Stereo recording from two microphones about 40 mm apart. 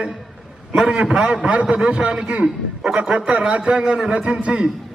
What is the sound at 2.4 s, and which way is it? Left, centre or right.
Speech, centre.